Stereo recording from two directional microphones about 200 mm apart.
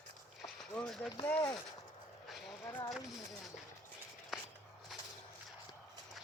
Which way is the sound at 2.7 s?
15° left (ahead or behind).